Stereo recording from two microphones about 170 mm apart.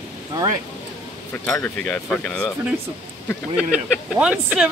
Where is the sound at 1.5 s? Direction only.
10° left (ahead or behind).